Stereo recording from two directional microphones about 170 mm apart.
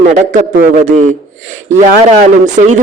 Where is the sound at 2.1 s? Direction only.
45° right (ahead or behind).